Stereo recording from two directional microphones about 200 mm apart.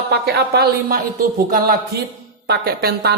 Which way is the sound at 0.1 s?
55° right (ahead or behind).